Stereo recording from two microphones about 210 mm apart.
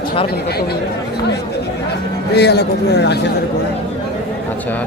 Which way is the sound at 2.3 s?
50° left (ahead or behind).